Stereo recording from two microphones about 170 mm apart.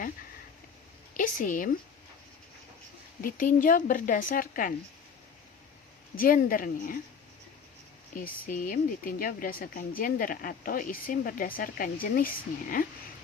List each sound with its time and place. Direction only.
1.1 s a woman's voice: 55° left (ahead or behind)
3.2 s a woman's voice: 55° left (ahead or behind)
6.1 s speech: 55° left (ahead or behind)
8.1 s speech: 55° left (ahead or behind)